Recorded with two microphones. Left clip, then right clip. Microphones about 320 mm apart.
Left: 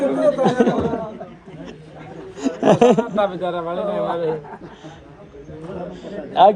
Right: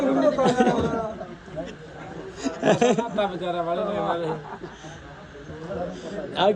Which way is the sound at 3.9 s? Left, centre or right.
Centre.